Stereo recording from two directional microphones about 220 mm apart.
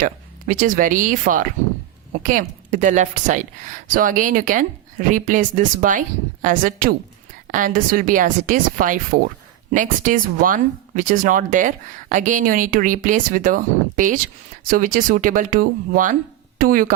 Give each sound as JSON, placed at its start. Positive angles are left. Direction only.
{"t": 0.0, "sound": "speech", "side_deg": -40}